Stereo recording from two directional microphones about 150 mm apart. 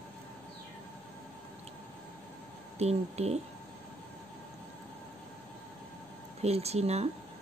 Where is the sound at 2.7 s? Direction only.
45° right (ahead or behind).